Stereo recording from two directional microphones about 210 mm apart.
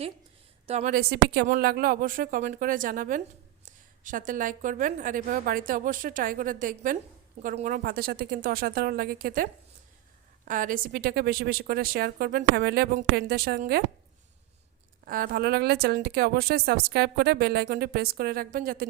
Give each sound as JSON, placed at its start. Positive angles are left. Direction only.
{"t": 0.7, "sound": "a woman's voice", "side_deg": -30}
{"t": 0.9, "sound": "a woman's voice", "side_deg": -50}
{"t": 15.0, "sound": "speech", "side_deg": -45}